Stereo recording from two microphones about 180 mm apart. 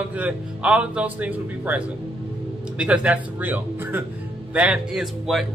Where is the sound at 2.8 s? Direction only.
5° right (ahead or behind).